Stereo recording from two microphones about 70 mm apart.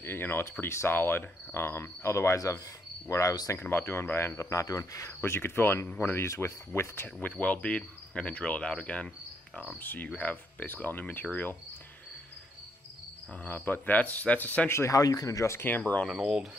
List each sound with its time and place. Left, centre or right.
0.0 s cricket: left
3.1 s speech: left
3.5 s cricket: left
4.4 s speech: left
5.9 s cricket: left
6.2 s cricket: left
7.2 s cricket: left
13.3 s cricket: left
14.7 s speech: left
15.5 s cricket: left
16.1 s speech: centre